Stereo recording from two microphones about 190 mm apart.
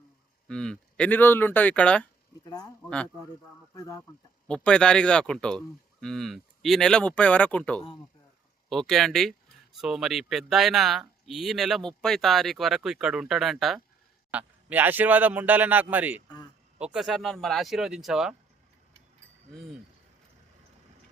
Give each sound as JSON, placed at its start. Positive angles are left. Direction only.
{"t": 0.4, "sound": "speech", "side_deg": 5}
{"t": 2.4, "sound": "speech", "side_deg": 20}
{"t": 3.8, "sound": "speech", "side_deg": 15}
{"t": 4.4, "sound": "a man's voice", "side_deg": 5}